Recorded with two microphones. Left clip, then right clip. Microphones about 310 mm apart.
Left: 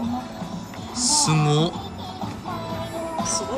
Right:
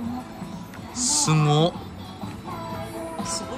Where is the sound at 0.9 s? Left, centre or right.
Centre.